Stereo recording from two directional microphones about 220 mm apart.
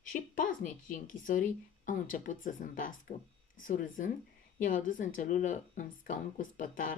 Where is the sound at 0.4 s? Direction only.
35° left (ahead or behind).